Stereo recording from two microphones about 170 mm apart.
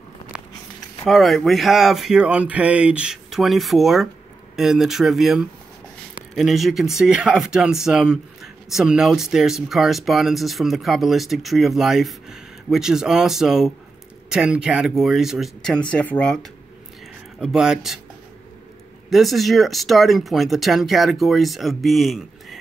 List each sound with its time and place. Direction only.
1.0 s speech: centre (ahead or behind)
17.4 s speech: 5° right (ahead or behind)
19.0 s speech: centre (ahead or behind)